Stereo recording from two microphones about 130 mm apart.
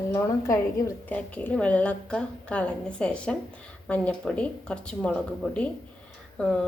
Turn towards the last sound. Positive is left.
turn(degrees=5)  # may be behind; listen again after turning